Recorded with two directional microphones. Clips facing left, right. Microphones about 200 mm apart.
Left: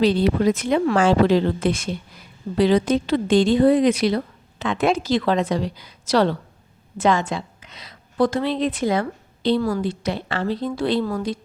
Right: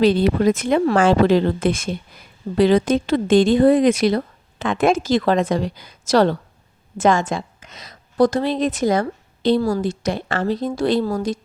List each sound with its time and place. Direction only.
0.0 s a woman's voice: 50° right (ahead or behind)